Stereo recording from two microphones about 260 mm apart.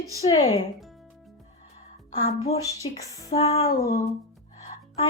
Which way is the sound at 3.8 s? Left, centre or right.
Centre.